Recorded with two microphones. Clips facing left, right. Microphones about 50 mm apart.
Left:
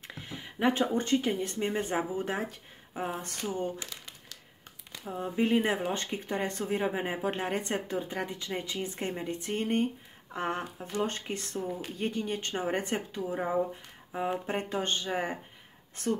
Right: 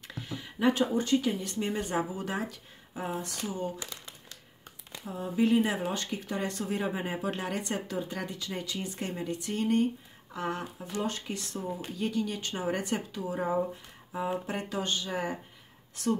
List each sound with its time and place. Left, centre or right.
0.1 s speech: left
5.1 s speech: left